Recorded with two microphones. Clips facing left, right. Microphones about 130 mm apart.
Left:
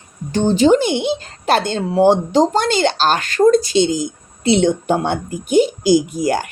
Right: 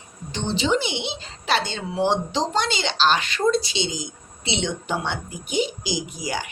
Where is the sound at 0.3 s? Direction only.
45° left (ahead or behind).